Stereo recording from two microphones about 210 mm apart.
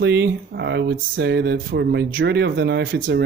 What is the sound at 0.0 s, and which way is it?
Speech, 55° right (ahead or behind).